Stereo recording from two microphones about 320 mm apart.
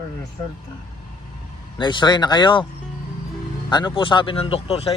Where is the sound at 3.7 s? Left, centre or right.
Centre.